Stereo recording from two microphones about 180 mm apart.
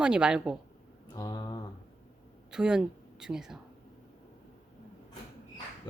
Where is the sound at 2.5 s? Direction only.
5° right (ahead or behind).